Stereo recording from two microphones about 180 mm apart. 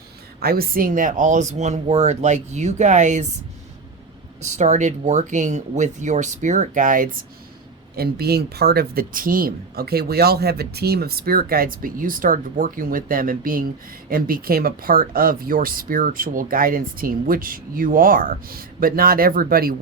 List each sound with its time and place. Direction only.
0.3 s speech: 55° right (ahead or behind); by 3.2 s 40° right (ahead or behind)
4.4 s speech: 40° right (ahead or behind)
7.9 s speech: 60° right (ahead or behind)